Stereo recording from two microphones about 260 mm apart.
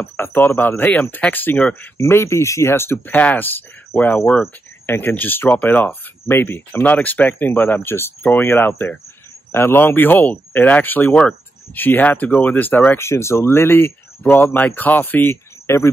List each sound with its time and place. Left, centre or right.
0.0 s speech: centre